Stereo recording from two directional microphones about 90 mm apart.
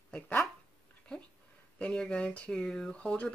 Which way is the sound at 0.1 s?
15° left (ahead or behind).